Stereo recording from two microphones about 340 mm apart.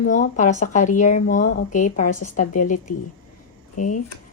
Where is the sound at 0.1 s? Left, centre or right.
Left.